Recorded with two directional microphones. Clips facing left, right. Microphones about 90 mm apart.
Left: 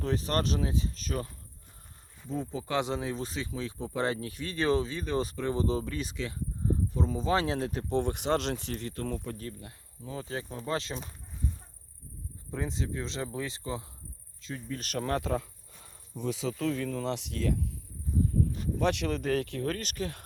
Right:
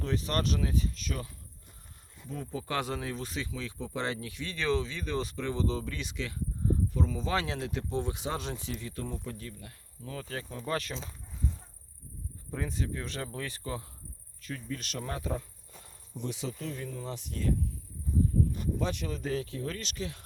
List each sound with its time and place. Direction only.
0.0 s speech: 35° left (ahead or behind)
2.3 s speech: 25° left (ahead or behind); by 7.9 s 40° left (ahead or behind)
7.9 s speech: 55° left (ahead or behind)
9.3 s speech: 40° left (ahead or behind)
10.1 s speech: 25° left (ahead or behind)
12.5 s speech: 25° left (ahead or behind)
14.8 s speech: 45° left (ahead or behind)
15.0 s cricket: 70° left (ahead or behind)
16.6 s speech: 90° left
18.8 s speech: 70° left (ahead or behind); by 20.2 s 50° left (ahead or behind)